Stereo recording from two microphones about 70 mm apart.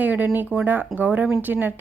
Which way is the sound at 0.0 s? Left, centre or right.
Right.